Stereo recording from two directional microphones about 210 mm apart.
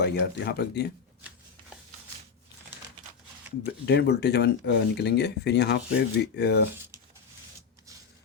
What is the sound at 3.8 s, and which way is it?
Speech, 50° left (ahead or behind).